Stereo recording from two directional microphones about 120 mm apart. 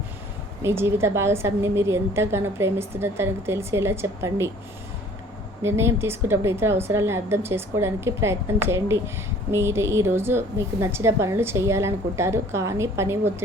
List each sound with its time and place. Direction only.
0.6 s a woman's voice: 20° right (ahead or behind)
5.6 s a woman's voice: 20° right (ahead or behind)